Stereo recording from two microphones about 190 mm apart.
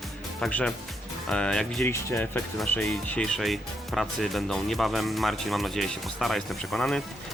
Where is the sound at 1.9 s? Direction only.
15° left (ahead or behind).